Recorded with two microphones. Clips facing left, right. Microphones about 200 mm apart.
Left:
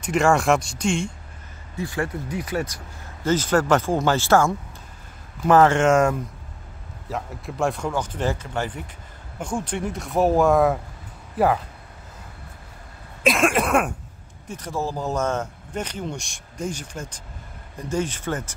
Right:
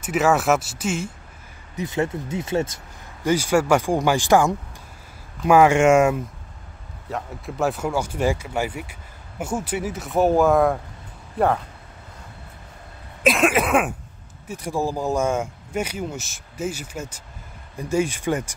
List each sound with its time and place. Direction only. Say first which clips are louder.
0.0 s speech: even; 5° right (ahead or behind)
1.8 s speech: right 3 dB; 20° right (ahead or behind)
3.3 s speech: right 1 dB; 10° right (ahead or behind); by 11.6 s 5° left (ahead or behind)
13.2 s speech: right 1 dB; centre (ahead or behind)